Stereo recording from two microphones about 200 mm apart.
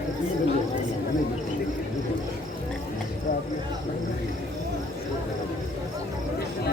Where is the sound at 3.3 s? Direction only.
50° left (ahead or behind).